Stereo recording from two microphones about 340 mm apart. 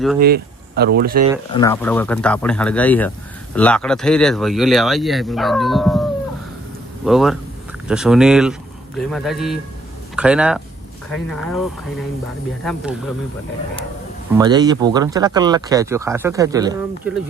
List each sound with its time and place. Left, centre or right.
0.2 s speech: right
1.5 s speech: centre
12.6 s speech: centre
14.3 s speech: centre